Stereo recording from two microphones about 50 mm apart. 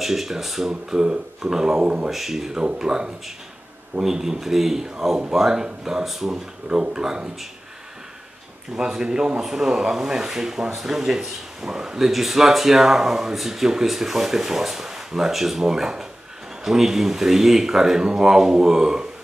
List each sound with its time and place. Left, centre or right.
0.0 s speech: centre
6.7 s speech: centre
8.7 s speech: centre